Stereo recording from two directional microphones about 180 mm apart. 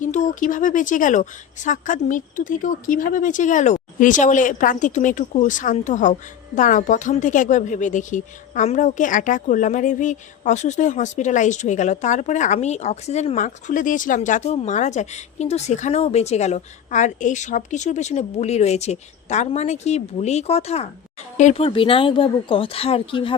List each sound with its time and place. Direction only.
0.0 s a woman's voice: 45° left (ahead or behind)